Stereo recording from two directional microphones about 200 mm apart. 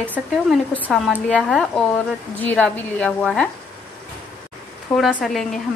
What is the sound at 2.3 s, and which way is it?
Speech, 10° left (ahead or behind).